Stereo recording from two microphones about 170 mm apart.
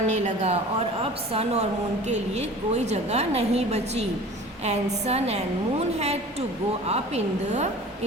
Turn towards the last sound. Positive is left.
turn(degrees=-40)  # may be behind; listen again after turning